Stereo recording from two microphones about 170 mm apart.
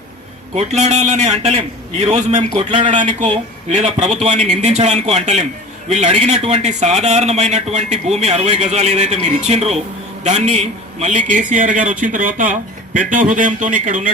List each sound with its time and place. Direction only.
0.5 s speech: 40° right (ahead or behind)